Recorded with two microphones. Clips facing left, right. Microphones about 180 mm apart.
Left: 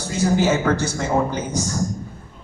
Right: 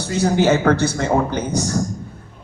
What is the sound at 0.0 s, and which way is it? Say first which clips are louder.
A man's voice: right 2 dB; 65° right (ahead or behind).